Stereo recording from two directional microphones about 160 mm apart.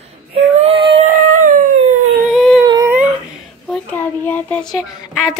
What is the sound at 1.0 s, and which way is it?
Howl, 55° right (ahead or behind).